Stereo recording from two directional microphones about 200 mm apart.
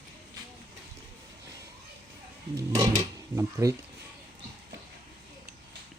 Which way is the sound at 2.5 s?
15° right (ahead or behind).